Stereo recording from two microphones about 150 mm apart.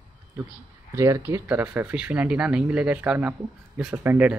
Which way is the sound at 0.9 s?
20° right (ahead or behind).